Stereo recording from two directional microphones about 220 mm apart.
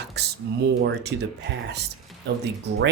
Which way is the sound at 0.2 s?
50° right (ahead or behind).